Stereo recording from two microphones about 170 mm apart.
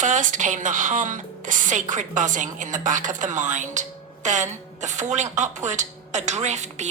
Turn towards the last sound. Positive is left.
turn(degrees=-40)  # may be behind; listen again after turning